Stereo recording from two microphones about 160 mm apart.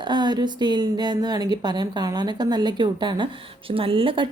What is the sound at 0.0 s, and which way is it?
A woman's voice, 30° right (ahead or behind).